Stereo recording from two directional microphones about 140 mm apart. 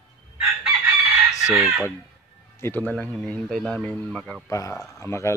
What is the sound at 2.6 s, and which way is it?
Speech, 15° left (ahead or behind).